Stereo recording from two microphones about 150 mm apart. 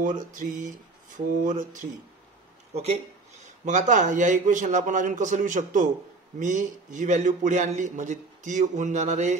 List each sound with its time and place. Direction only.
0.0 s a man's voice: 60° right (ahead or behind)
2.7 s a man's voice: 45° right (ahead or behind)